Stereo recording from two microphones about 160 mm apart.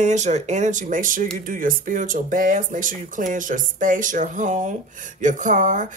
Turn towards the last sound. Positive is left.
turn(degrees=-55)  # may be behind; listen again after turning